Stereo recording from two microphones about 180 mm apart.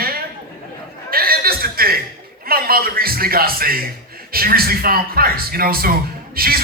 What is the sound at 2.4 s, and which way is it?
Speech, 55° right (ahead or behind).